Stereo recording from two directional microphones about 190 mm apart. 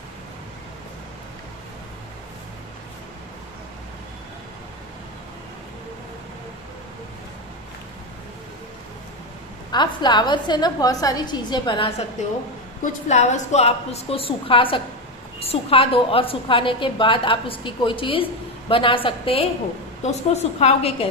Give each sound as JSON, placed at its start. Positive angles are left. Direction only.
{"t": 9.7, "sound": "a woman's voice", "side_deg": 25}
{"t": 12.8, "sound": "a woman's voice", "side_deg": 40}